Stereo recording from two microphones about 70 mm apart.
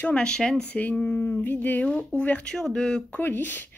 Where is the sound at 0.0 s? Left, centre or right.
Centre.